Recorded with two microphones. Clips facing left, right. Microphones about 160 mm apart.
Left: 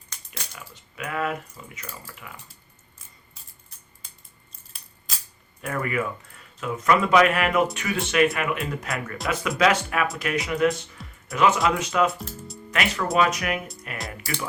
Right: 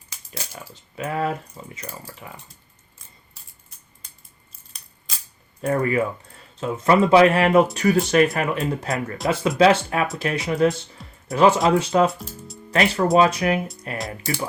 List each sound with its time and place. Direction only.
0.1 s typing: 5° right (ahead or behind)
0.5 s speech: 30° right (ahead or behind)
4.7 s a sound: 5° left (ahead or behind)
5.6 s speech: 30° right (ahead or behind)
12.1 s speech: centre (ahead or behind)
12.7 s speech: 30° right (ahead or behind)